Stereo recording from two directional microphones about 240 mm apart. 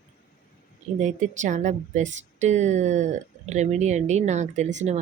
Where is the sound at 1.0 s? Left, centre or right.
Right.